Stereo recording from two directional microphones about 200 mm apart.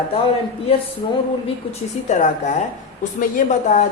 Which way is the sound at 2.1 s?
40° left (ahead or behind).